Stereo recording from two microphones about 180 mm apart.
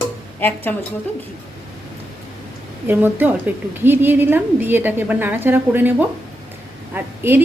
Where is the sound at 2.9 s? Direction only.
10° right (ahead or behind).